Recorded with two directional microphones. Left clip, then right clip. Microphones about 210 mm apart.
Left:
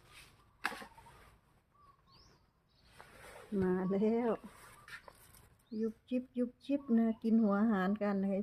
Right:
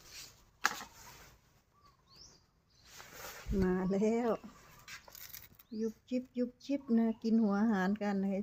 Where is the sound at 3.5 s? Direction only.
10° right (ahead or behind).